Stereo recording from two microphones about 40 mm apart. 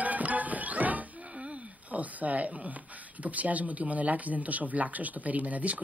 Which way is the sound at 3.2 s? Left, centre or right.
Right.